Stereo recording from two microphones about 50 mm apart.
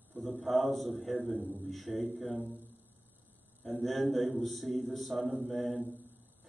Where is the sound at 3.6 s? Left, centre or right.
Centre.